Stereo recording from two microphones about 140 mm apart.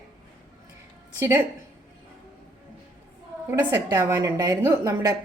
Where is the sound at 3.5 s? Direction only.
25° right (ahead or behind).